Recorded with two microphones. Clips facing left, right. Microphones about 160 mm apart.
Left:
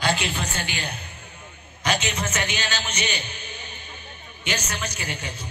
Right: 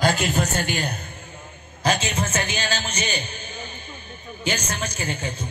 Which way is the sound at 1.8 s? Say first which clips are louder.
Right 3 dB; 35° right (ahead or behind).